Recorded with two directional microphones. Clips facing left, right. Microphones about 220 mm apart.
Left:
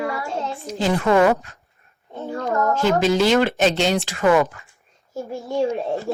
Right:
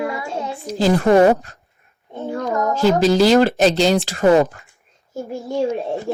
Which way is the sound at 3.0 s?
35° right (ahead or behind).